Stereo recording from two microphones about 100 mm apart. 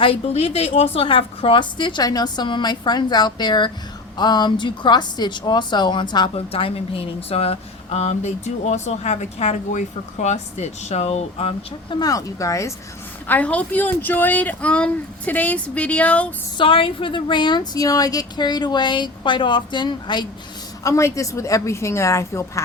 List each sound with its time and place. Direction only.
0.0 s a woman's voice: 75° left (ahead or behind); by 6.3 s 50° left (ahead or behind)
6.3 s speech: 70° left (ahead or behind)
11.9 s speech: 40° left (ahead or behind)
13.2 s speech: 15° left (ahead or behind)
16.6 s a woman's voice: 60° left (ahead or behind)
20.8 s a woman's voice: 30° left (ahead or behind)